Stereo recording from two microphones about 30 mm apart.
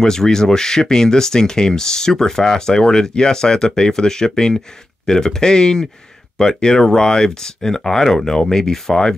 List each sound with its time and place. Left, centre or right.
0.0 s speech: centre